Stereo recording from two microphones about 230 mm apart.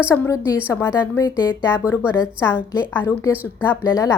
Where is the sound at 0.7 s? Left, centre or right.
Centre.